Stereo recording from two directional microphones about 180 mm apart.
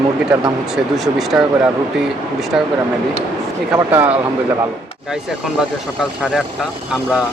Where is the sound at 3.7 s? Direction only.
10° right (ahead or behind).